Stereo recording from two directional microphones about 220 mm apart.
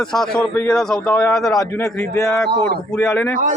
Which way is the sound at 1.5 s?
15° left (ahead or behind).